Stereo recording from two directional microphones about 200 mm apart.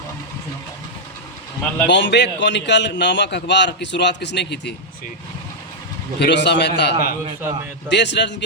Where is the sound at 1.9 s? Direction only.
60° left (ahead or behind).